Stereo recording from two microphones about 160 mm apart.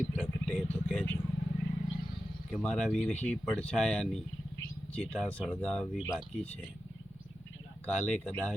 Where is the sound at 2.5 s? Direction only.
5° left (ahead or behind).